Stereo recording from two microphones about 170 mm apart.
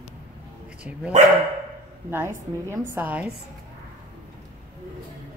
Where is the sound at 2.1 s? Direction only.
15° right (ahead or behind).